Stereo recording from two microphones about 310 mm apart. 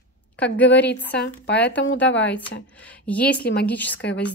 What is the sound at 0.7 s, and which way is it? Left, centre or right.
Speech, left.